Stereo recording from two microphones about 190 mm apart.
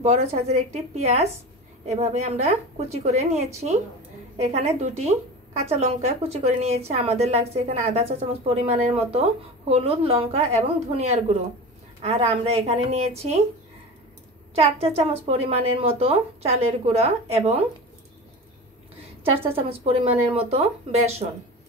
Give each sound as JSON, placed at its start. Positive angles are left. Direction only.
{"t": 0.0, "sound": "a woman's voice", "side_deg": -35}
{"t": 14.5, "sound": "a woman's voice", "side_deg": -35}
{"t": 19.5, "sound": "a woman's voice", "side_deg": -30}